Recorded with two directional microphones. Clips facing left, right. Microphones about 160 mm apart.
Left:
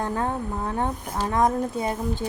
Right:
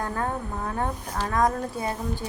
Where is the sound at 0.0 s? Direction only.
20° left (ahead or behind).